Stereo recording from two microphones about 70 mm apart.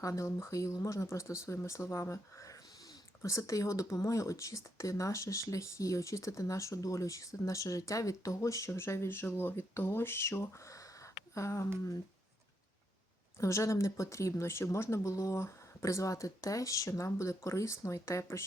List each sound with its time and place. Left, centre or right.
0.0 s speech: left
13.4 s speech: left